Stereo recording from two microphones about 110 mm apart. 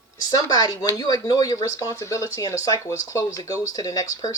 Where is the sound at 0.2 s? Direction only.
35° left (ahead or behind).